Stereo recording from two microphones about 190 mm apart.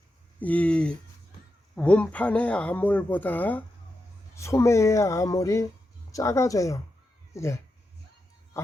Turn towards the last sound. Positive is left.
turn(degrees=15)  # may be behind; listen again after turning